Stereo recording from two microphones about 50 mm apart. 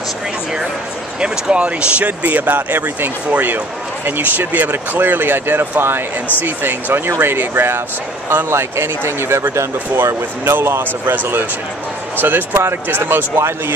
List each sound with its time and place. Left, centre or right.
1.2 s speech: right